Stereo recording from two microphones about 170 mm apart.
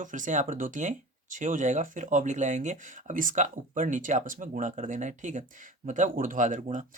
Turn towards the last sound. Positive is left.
turn(degrees=-50)  # may be behind; listen again after turning